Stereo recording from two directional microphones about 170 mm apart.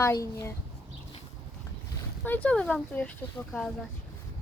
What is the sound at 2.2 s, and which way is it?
Speech, 10° left (ahead or behind).